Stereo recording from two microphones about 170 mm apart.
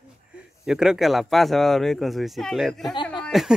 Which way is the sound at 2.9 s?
30° left (ahead or behind).